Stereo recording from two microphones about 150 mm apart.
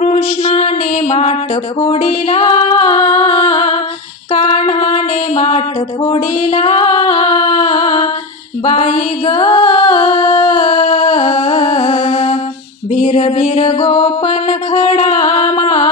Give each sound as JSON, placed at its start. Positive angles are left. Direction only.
{"t": 0.0, "sound": "a sound", "side_deg": 50}
{"t": 1.8, "sound": "mantra", "side_deg": 40}
{"t": 2.9, "sound": "a sound", "side_deg": 40}
{"t": 3.4, "sound": "a sound", "side_deg": 30}
{"t": 4.3, "sound": "mantra", "side_deg": 45}
{"t": 6.8, "sound": "a capella", "side_deg": 35}
{"t": 7.6, "sound": "music", "side_deg": 30}
{"t": 8.6, "sound": "music", "side_deg": 45}
{"t": 12.9, "sound": "mantra", "side_deg": 45}
{"t": 15.5, "sound": "music", "side_deg": 45}